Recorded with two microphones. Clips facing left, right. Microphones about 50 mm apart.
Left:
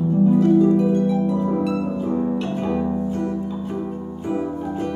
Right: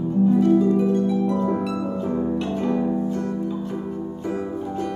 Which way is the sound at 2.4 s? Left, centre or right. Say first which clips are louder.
Even; left.